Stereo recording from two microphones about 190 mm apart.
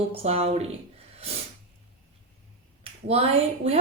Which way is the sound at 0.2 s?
30° right (ahead or behind).